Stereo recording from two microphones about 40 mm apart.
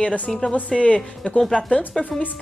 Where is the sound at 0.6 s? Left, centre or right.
Left.